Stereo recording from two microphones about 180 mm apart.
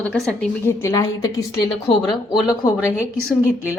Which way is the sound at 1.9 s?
30° left (ahead or behind).